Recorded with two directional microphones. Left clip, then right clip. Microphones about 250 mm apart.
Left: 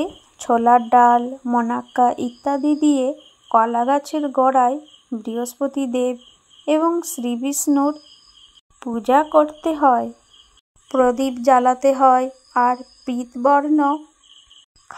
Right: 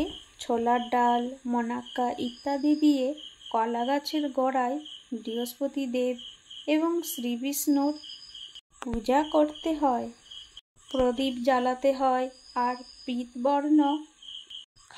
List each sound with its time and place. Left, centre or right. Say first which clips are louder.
0.0 s speech: left 7 dB; left
9.0 s speech: left 9 dB; centre
11.1 s speech: left 9 dB; centre